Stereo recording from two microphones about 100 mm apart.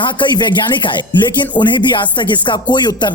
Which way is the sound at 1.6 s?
50° left (ahead or behind).